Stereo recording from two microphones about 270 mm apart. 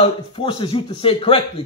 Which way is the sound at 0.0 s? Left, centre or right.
Centre.